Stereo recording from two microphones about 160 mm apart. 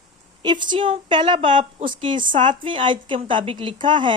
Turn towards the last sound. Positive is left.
turn(degrees=-30)  # may be behind; listen again after turning